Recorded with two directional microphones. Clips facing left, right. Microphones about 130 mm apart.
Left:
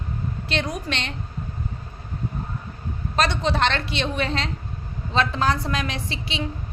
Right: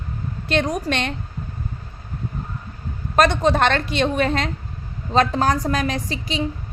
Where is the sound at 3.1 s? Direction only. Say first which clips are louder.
Right 6 dB; 50° right (ahead or behind).